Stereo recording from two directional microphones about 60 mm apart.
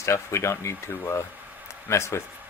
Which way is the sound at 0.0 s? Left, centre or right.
Left.